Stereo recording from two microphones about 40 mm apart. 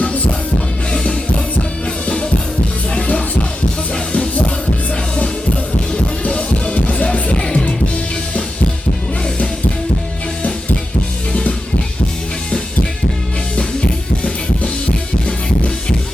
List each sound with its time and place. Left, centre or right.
2.9 s music: left
5.9 s music: left